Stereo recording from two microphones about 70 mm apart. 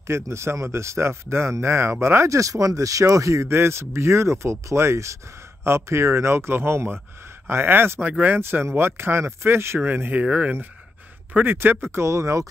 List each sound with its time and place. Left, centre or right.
0.0 s speech: right
8.4 s speech: right